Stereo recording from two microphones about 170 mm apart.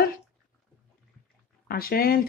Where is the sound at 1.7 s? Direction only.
65° left (ahead or behind).